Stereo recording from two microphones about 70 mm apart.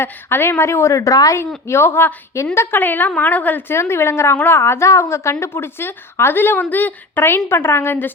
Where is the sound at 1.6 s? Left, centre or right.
Left.